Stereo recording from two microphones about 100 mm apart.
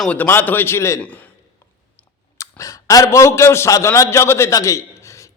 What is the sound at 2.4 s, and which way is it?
A man's voice, 30° left (ahead or behind).